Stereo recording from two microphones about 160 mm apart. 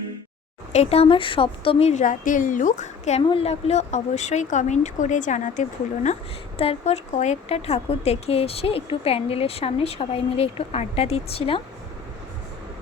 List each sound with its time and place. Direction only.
0.7 s speech: 40° left (ahead or behind)
6.6 s speech: 40° left (ahead or behind)